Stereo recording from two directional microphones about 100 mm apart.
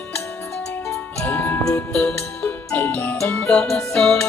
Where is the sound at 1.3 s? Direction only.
20° left (ahead or behind).